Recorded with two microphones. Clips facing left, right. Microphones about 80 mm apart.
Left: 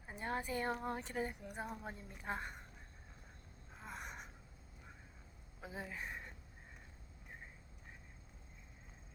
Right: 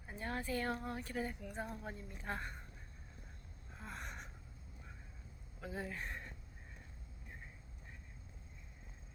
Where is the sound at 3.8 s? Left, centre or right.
Centre.